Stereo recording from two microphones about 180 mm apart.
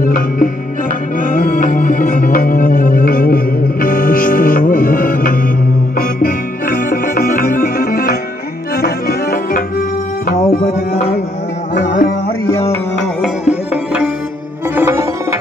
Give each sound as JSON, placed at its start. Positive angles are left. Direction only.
{"t": 0.0, "sound": "music", "side_deg": 50}
{"t": 11.8, "sound": "music", "side_deg": 45}
{"t": 13.5, "sound": "music", "side_deg": -5}